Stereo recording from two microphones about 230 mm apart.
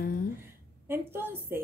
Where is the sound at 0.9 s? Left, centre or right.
Centre.